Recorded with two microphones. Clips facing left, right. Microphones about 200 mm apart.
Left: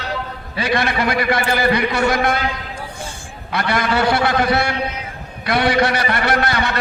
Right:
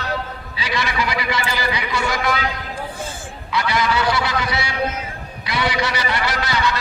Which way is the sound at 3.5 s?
60° left (ahead or behind).